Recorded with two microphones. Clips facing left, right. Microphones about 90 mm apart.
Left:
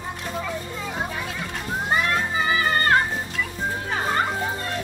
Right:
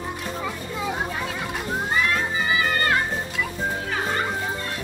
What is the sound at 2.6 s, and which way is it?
Music, 40° left (ahead or behind).